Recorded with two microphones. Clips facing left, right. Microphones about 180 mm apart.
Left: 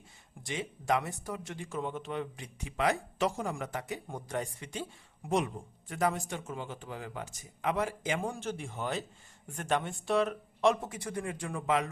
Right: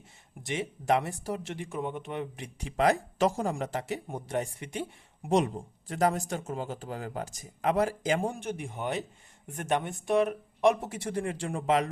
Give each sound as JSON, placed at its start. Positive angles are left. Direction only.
{"t": 0.4, "sound": "speech", "side_deg": -25}
{"t": 1.5, "sound": "speech", "side_deg": -20}
{"t": 2.7, "sound": "speech", "side_deg": -40}
{"t": 5.3, "sound": "speech", "side_deg": -35}
{"t": 8.3, "sound": "speech", "side_deg": -15}